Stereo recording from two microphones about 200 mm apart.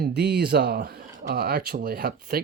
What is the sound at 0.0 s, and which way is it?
Speech, 55° right (ahead or behind).